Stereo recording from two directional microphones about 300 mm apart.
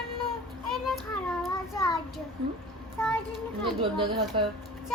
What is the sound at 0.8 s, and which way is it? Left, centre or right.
A child's voice, centre.